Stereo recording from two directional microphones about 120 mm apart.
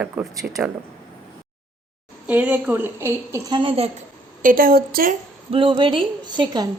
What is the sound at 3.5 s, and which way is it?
Speech, 45° right (ahead or behind).